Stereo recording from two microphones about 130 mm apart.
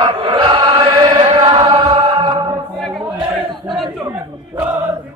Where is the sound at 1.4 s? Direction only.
40° right (ahead or behind).